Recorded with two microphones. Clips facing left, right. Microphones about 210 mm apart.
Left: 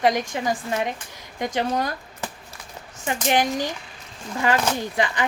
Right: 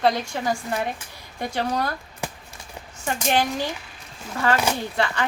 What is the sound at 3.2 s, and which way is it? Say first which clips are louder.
Speech: left 1 dB; 15° left (ahead or behind).